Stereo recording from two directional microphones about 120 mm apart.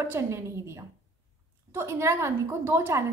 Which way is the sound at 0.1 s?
20° right (ahead or behind).